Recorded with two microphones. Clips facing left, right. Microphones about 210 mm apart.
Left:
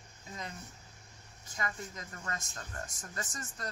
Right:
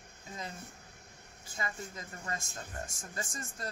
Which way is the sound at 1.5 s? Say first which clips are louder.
Even; 30° right (ahead or behind).